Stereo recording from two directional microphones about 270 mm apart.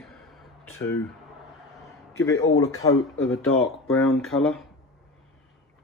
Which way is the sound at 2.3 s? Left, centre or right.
Left.